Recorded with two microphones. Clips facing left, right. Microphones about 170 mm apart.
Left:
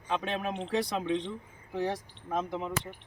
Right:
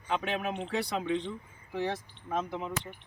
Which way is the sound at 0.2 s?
5° right (ahead or behind).